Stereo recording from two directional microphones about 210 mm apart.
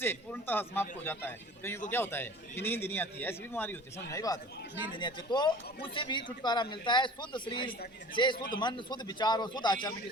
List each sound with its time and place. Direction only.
0.0 s a man's voice: 10° left (ahead or behind)